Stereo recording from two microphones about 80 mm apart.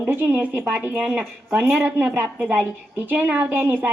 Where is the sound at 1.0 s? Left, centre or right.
Centre.